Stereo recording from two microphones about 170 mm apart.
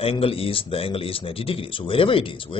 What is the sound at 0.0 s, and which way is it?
A man's voice, 35° left (ahead or behind).